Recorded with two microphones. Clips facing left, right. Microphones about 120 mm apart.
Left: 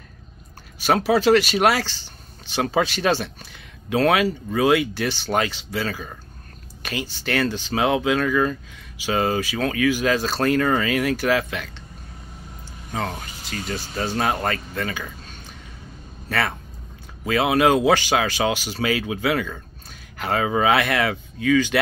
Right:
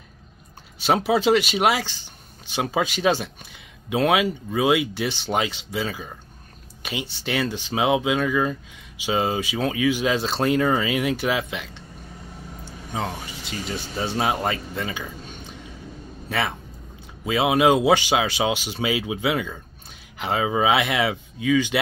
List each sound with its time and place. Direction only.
0.7 s speech: 20° right (ahead or behind); by 4.8 s 5° right (ahead or behind)
4.9 s speech: 20° right (ahead or behind)
12.9 s speech: 15° right (ahead or behind)
14.1 s a man's voice: 10° right (ahead or behind)